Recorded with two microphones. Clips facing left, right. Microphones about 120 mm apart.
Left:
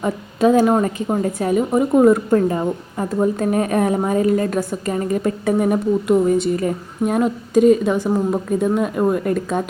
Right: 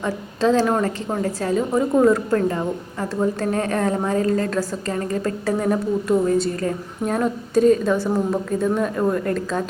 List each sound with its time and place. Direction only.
0.0 s a woman's voice: 15° left (ahead or behind)